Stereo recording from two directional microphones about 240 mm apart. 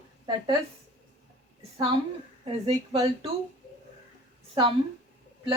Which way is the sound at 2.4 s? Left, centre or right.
Right.